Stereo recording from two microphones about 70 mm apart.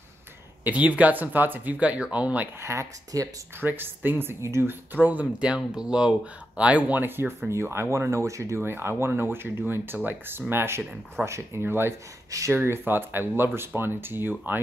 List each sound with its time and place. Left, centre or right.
0.7 s speech: right
2.6 s speech: right
3.1 s speech: right
3.6 s speech: right
12.3 s speech: right
12.5 s speech: right